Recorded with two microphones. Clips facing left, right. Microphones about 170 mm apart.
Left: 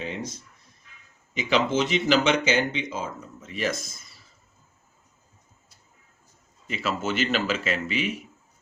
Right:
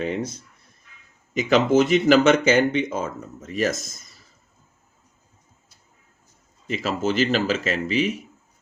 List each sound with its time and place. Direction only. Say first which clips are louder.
1.3 s speech: right 6 dB; 45° right (ahead or behind)
6.7 s speech: right 4 dB; 40° right (ahead or behind)